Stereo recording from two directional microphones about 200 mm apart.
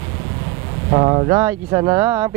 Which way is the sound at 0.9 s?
25° right (ahead or behind).